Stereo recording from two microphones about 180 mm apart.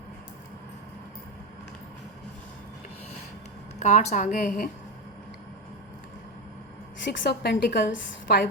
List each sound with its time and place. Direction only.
3.8 s a woman's voice: 40° left (ahead or behind)
7.2 s a woman's voice: 70° left (ahead or behind)